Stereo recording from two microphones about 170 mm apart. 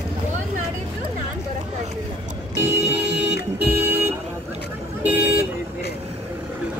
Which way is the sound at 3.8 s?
15° right (ahead or behind).